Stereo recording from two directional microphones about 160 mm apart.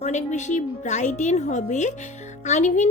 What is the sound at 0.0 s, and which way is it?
Speech, 45° left (ahead or behind).